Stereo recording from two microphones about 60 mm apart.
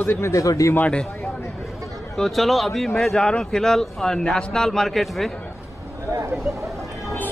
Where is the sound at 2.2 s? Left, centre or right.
Centre.